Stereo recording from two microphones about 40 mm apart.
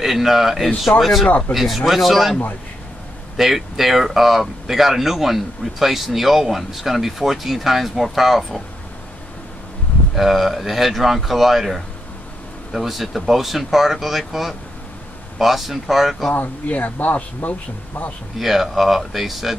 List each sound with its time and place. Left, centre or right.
0.0 s speech: centre
3.3 s speech: centre
10.1 s speech: centre
16.3 s speech: left
18.4 s speech: centre